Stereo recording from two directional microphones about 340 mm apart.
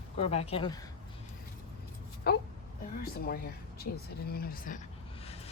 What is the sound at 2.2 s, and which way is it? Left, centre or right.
Speech, left.